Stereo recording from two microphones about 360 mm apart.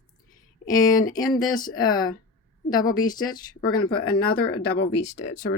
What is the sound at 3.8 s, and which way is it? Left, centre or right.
Speech, left.